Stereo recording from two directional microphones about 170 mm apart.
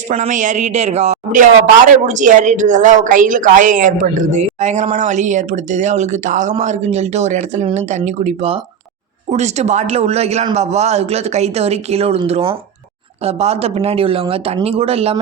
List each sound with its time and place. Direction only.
0.1 s a man's voice: 45° right (ahead or behind)